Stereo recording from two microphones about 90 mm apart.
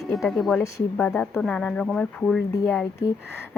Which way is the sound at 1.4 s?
10° left (ahead or behind).